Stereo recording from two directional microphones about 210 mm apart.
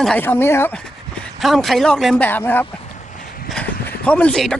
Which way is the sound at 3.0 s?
35° left (ahead or behind).